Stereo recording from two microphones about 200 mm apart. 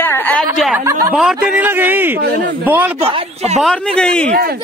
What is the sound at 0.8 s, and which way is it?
Speech, 15° right (ahead or behind).